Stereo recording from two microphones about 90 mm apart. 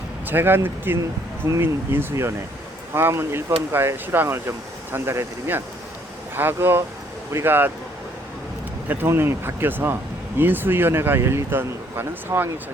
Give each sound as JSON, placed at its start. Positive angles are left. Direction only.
{"t": 0.3, "sound": "speech", "side_deg": -25}
{"t": 8.9, "sound": "speech", "side_deg": -25}